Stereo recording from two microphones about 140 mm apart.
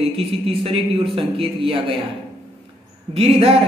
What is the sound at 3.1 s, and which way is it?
Speech, 45° right (ahead or behind).